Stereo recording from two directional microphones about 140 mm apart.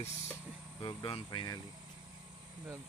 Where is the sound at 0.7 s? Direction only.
35° left (ahead or behind).